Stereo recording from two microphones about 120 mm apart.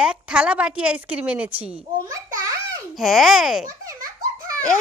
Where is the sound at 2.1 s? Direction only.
30° right (ahead or behind).